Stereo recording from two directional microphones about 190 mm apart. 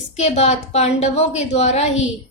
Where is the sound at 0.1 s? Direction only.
35° left (ahead or behind).